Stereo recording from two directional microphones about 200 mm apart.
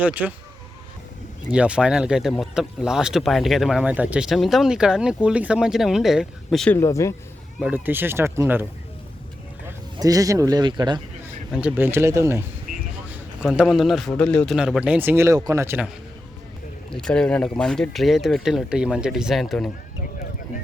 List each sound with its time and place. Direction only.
0.0 s speech: 10° right (ahead or behind)
1.5 s speech: 5° right (ahead or behind)
6.7 s speech: 15° left (ahead or behind)
7.6 s speech: 10° right (ahead or behind)
9.6 s speech: 15° right (ahead or behind)
11.5 s speech: 10° right (ahead or behind)
13.4 s speech: centre (ahead or behind)
16.9 s speech: 5° left (ahead or behind)